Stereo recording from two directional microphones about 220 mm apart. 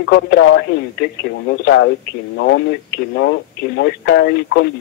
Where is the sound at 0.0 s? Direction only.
55° left (ahead or behind).